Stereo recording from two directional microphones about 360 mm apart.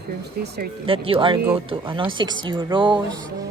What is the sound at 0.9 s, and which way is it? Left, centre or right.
Speech, centre.